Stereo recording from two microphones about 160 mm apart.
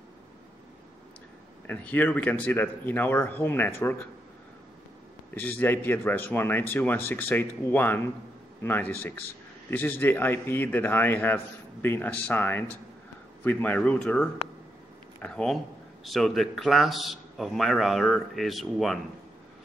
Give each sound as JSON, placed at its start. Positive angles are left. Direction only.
{"t": 1.7, "sound": "a man's voice", "side_deg": 10}
{"t": 5.3, "sound": "a man's voice", "side_deg": 10}